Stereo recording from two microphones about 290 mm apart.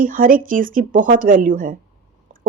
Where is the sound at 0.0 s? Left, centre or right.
Right.